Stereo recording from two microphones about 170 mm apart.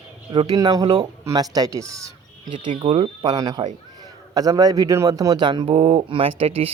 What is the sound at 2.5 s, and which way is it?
Speech, 30° right (ahead or behind).